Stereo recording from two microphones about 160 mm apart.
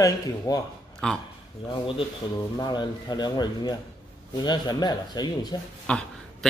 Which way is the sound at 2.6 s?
25° left (ahead or behind).